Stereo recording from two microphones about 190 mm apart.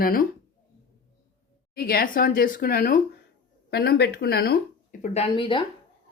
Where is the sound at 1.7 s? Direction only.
55° left (ahead or behind).